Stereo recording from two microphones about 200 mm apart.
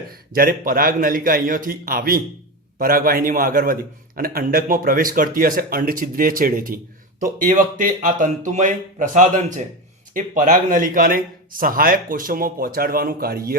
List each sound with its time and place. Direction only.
0.3 s a man's voice: 45° right (ahead or behind)